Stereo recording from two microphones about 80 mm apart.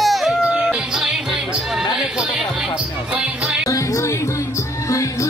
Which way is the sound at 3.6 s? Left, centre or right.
Left.